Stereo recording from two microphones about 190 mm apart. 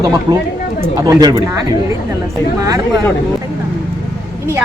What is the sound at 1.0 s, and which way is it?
Speech, 20° right (ahead or behind).